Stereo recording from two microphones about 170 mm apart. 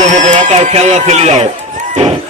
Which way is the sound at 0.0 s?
45° right (ahead or behind).